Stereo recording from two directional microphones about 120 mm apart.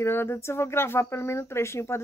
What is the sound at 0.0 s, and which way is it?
Speech, 20° left (ahead or behind).